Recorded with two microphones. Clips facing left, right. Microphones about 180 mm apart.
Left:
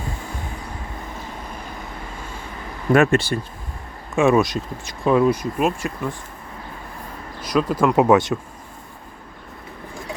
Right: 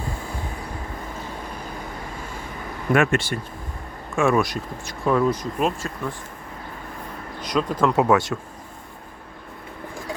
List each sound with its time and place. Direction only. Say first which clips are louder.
2.9 s speech: left 4 dB; 35° left (ahead or behind)
4.1 s speech: left 3 dB; 20° left (ahead or behind)
7.4 s speech: left 3 dB; 5° left (ahead or behind)
7.9 s speech: left 5 dB; 20° left (ahead or behind)